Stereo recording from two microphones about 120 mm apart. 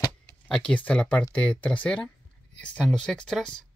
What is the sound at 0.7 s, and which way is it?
Speech, 10° left (ahead or behind).